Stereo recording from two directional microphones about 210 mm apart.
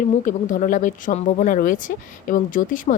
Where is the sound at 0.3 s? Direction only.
40° left (ahead or behind).